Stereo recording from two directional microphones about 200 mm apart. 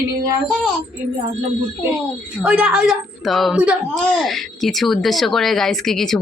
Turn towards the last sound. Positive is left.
turn(degrees=0)  # may be behind; listen again after turning